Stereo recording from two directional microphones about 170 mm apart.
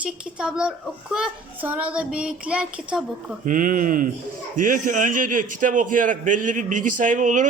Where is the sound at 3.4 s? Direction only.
50° right (ahead or behind).